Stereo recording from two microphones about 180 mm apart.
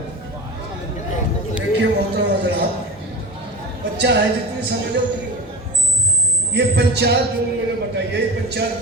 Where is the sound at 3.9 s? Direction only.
70° right (ahead or behind).